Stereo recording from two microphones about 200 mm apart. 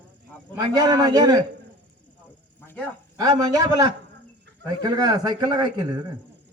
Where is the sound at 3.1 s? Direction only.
20° right (ahead or behind).